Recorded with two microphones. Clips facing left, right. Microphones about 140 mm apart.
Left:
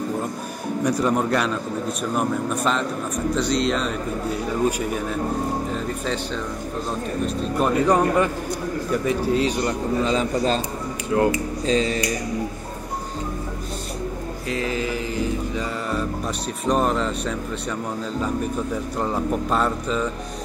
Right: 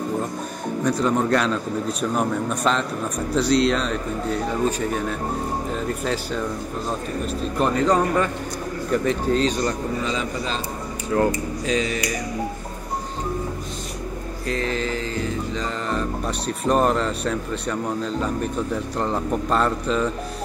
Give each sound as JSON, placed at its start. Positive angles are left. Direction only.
{"t": 0.8, "sound": "a man's voice", "side_deg": 10}
{"t": 7.6, "sound": "mantra", "side_deg": 15}
{"t": 9.6, "sound": "a man's voice", "side_deg": 25}
{"t": 10.1, "sound": "a man's voice", "side_deg": 40}
{"t": 11.1, "sound": "a man's voice", "side_deg": 20}
{"t": 11.6, "sound": "a man's voice", "side_deg": 30}
{"t": 14.5, "sound": "mantra", "side_deg": 10}
{"t": 16.4, "sound": "a man's voice", "side_deg": 0}
{"t": 18.9, "sound": "a man's voice", "side_deg": 5}